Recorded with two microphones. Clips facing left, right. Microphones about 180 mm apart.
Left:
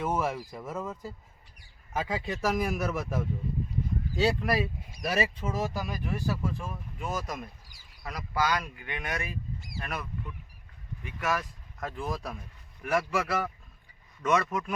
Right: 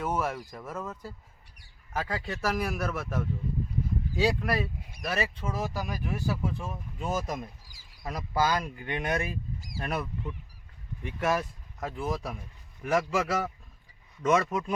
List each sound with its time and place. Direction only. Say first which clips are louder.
0.0 s a man's voice: left 1 dB; 5° left (ahead or behind)
6.4 s speech: right 1 dB; 20° right (ahead or behind)
11.8 s speech: right 2 dB; 10° right (ahead or behind)